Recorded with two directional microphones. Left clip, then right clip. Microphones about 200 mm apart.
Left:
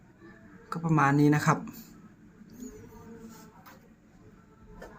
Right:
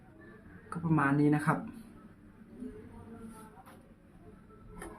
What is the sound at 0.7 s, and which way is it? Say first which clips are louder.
Speech: left 5 dB; 20° left (ahead or behind).